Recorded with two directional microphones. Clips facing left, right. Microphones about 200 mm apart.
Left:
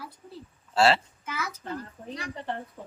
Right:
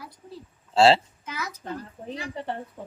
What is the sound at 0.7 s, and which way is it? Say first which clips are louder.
Speech: right 4 dB; 25° right (ahead or behind).